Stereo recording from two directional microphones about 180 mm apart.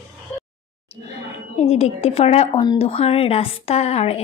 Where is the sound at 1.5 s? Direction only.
35° left (ahead or behind).